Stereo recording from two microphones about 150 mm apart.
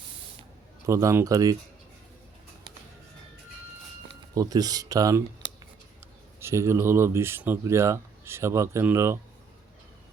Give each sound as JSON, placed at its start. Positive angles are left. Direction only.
{"t": 0.9, "sound": "speech", "side_deg": -20}
{"t": 4.4, "sound": "speech", "side_deg": -25}
{"t": 6.4, "sound": "speech", "side_deg": -15}